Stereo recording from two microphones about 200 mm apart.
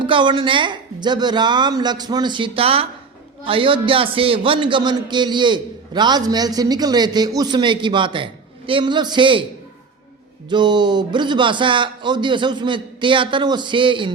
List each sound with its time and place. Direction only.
0.0 s a man's voice: 25° right (ahead or behind)
10.5 s a man's voice: 20° right (ahead or behind)